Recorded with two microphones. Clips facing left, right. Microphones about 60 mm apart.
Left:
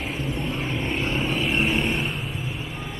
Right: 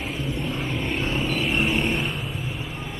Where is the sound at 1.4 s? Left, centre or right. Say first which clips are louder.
Even; centre.